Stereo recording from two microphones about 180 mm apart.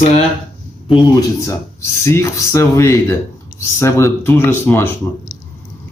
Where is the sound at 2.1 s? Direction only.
15° left (ahead or behind).